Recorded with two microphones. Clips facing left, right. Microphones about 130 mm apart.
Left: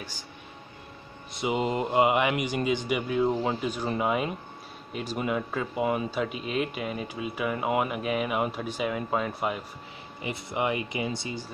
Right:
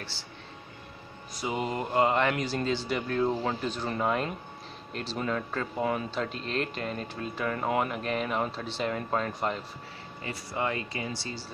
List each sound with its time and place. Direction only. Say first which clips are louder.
1.3 s speech: left 4 dB; 20° left (ahead or behind)